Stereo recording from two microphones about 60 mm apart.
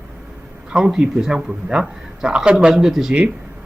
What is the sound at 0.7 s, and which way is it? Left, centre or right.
Speech, centre.